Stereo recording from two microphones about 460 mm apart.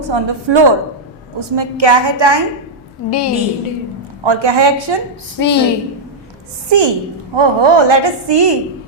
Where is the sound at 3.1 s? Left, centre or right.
Left.